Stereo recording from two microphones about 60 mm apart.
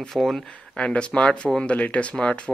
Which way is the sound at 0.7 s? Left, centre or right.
Centre.